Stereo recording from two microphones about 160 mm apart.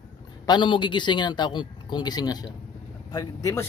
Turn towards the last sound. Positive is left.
turn(degrees=20)  # may be behind; listen again after turning